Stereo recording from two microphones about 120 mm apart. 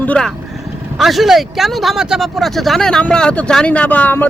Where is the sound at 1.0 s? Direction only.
Centre (ahead or behind).